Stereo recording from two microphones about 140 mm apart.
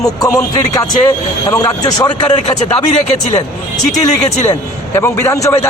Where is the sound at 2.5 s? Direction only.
50° left (ahead or behind).